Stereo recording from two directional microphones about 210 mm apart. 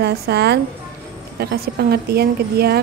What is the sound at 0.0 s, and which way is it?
A woman's voice, 50° right (ahead or behind).